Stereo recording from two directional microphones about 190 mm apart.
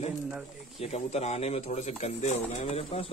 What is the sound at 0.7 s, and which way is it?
A man's voice, 35° left (ahead or behind).